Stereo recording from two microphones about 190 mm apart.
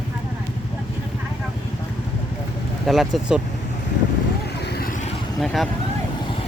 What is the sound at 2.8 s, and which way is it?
Speech, centre (ahead or behind).